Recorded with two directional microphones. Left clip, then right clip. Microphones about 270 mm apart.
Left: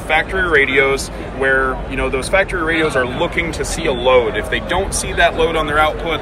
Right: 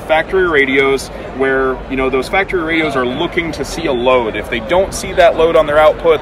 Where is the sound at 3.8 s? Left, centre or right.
Right.